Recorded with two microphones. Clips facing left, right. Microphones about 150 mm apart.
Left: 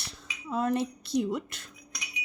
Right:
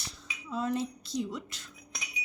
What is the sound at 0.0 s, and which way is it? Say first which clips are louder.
A woman's voice: left 2 dB; 55° left (ahead or behind).